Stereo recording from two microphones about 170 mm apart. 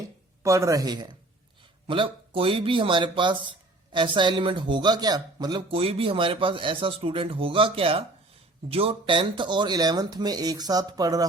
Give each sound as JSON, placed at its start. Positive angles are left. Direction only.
{"t": 0.4, "sound": "speech", "side_deg": -20}